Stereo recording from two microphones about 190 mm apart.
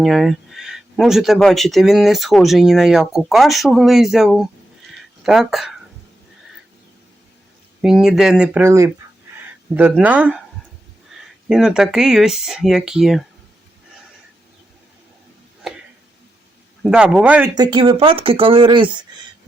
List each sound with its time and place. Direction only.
0.0 s speech: centre (ahead or behind)
7.8 s speech: 5° right (ahead or behind)
10.0 s speech: 5° right (ahead or behind)
11.4 s speech: 5° right (ahead or behind)
15.6 s a sound: centre (ahead or behind)
16.8 s speech: 5° right (ahead or behind)
17.5 s speech: 25° right (ahead or behind)